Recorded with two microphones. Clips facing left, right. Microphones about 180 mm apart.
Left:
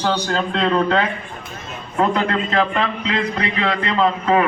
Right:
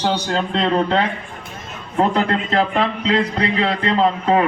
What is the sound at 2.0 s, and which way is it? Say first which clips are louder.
A man's voice: right 1 dB; 30° right (ahead or behind).